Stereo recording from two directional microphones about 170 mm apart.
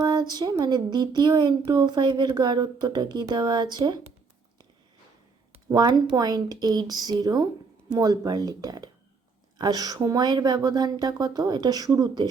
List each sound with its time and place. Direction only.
0.0 s speech: 25° right (ahead or behind)
5.6 s speech: 25° right (ahead or behind)